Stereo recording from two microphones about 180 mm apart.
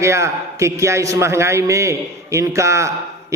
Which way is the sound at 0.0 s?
15° right (ahead or behind).